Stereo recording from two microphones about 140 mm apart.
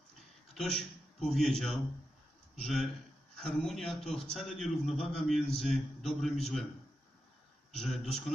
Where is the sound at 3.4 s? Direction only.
Centre (ahead or behind).